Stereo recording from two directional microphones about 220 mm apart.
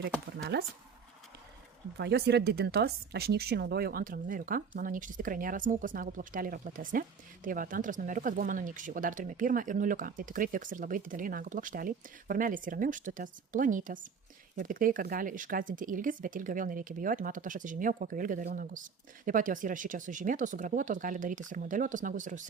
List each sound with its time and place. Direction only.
0.0 s speech: 50° right (ahead or behind)
2.0 s speech: 45° right (ahead or behind)